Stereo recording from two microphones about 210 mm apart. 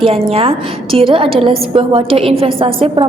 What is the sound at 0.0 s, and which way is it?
A woman's voice, 25° right (ahead or behind).